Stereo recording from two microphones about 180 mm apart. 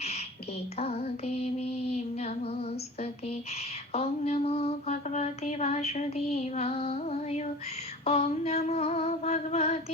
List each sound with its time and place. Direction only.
0.8 s music: 35° left (ahead or behind)
8.0 s female singing: 35° left (ahead or behind)